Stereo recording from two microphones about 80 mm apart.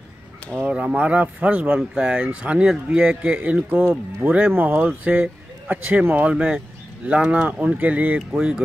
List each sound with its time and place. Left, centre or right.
0.7 s speech: centre